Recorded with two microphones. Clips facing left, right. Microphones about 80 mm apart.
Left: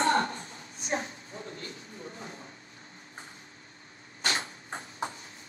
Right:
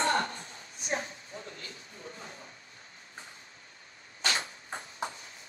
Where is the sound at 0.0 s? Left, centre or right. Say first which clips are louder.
Left 3 dB; left.